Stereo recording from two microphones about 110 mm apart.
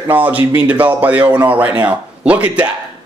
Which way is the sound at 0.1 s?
15° right (ahead or behind).